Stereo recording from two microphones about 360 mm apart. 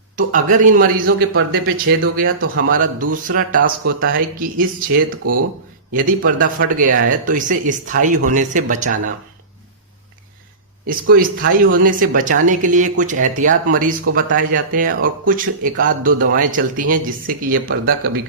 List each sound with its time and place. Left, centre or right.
0.2 s speech: right
5.2 s speech: right
5.9 s speech: right
10.8 s speech: right